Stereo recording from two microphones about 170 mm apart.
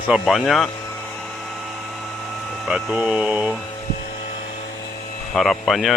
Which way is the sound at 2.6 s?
5° right (ahead or behind).